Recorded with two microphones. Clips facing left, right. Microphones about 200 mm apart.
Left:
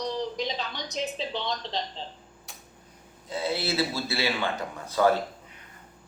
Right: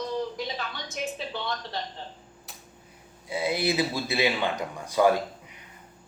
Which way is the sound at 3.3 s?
15° right (ahead or behind).